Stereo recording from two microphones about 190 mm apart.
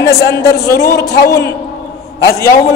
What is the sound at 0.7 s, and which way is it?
Speech, 15° left (ahead or behind).